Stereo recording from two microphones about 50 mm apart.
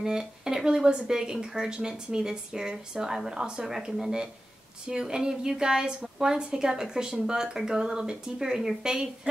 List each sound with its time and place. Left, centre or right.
0.0 s a woman's voice: centre